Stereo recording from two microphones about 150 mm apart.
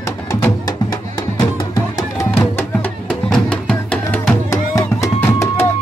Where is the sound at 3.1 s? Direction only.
5° left (ahead or behind).